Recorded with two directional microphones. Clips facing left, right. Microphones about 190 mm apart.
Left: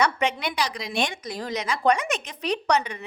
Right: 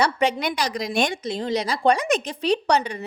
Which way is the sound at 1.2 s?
25° right (ahead or behind).